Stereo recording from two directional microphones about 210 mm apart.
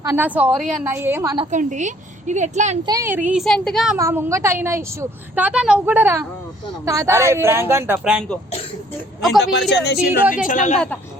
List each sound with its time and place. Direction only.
0.0 s a woman's voice: 10° right (ahead or behind)
1.5 s a woman's voice: 35° right (ahead or behind)
2.8 s a woman's voice: 15° right (ahead or behind); by 3.9 s centre (ahead or behind)
3.9 s a woman's voice: 10° right (ahead or behind)
9.4 s speech: 55° left (ahead or behind)
10.1 s a woman's voice: 10° right (ahead or behind)
10.4 s speech: 35° left (ahead or behind)